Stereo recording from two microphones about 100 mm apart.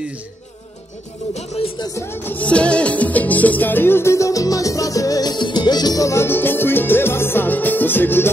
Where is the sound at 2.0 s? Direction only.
20° left (ahead or behind).